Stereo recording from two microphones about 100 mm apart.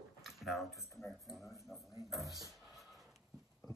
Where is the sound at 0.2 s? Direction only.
Centre (ahead or behind).